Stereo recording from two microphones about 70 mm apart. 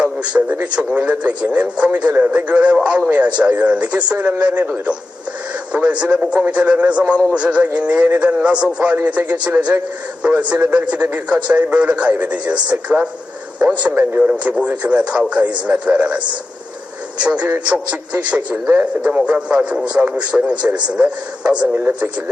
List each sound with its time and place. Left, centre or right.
0.0 s radio: centre
0.6 s a man's voice: centre
14.0 s a man's voice: right
17.2 s a man's voice: centre